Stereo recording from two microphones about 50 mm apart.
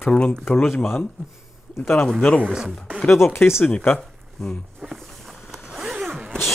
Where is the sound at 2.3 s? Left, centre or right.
Left.